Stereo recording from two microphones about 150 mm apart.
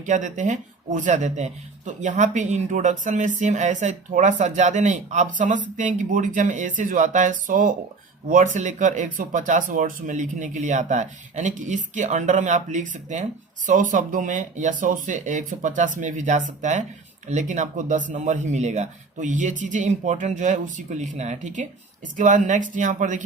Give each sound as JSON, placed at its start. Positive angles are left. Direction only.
{"t": 0.0, "sound": "speech", "side_deg": -55}
{"t": 8.3, "sound": "speech", "side_deg": -55}